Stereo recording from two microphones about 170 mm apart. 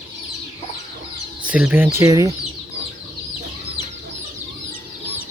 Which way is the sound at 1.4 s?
5° right (ahead or behind).